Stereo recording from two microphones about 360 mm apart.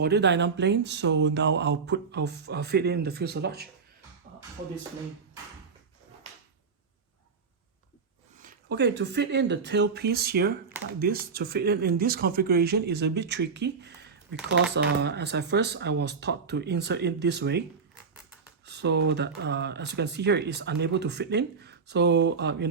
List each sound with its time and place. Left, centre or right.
0.0 s speech: right
8.4 s speech: right
18.6 s speech: right